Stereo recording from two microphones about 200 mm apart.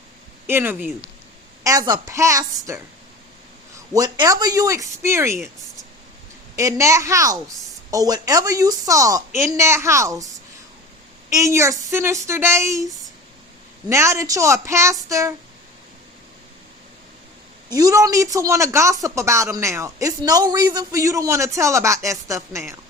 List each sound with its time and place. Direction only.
0.4 s speech: 10° right (ahead or behind)
3.9 s speech: 20° right (ahead or behind)
6.6 s speech: 15° right (ahead or behind)
11.3 s speech: 15° right (ahead or behind)
13.9 s speech: 15° right (ahead or behind)
17.7 s speech: 15° right (ahead or behind)